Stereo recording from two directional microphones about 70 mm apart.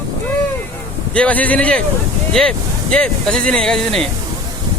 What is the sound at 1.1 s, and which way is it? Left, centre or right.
Speech, centre.